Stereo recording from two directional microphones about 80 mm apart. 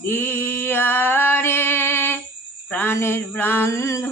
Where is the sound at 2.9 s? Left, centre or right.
Left.